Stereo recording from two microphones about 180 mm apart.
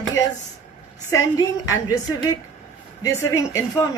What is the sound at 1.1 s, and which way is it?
A woman's voice, 15° left (ahead or behind).